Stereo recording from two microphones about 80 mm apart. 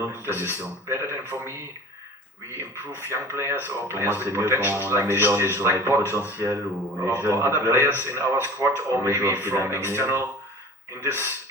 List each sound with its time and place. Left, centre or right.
0.0 s speech: right
2.9 s speech: right